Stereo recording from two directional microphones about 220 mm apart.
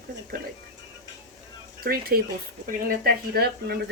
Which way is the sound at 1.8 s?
45° right (ahead or behind).